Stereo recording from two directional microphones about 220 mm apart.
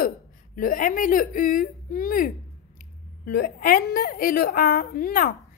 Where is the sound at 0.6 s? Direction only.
40° left (ahead or behind).